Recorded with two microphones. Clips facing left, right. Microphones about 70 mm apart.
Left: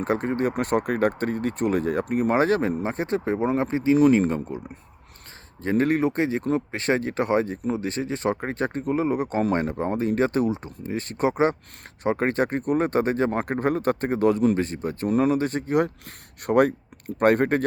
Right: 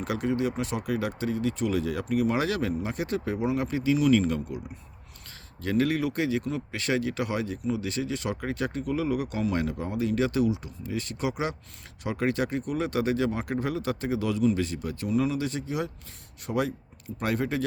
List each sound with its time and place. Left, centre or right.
0.0 s speech: left
5.6 s speech: left